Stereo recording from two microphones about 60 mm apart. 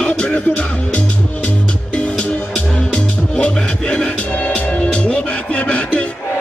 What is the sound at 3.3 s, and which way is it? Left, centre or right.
Music, centre.